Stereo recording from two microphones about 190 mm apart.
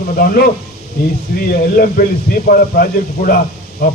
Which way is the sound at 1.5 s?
50° left (ahead or behind).